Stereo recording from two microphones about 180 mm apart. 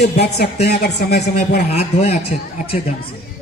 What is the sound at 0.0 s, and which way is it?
Speech, 60° left (ahead or behind).